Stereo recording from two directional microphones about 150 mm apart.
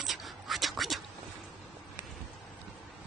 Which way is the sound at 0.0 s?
Centre (ahead or behind).